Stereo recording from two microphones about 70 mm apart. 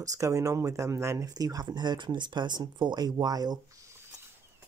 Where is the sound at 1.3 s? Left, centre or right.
Right.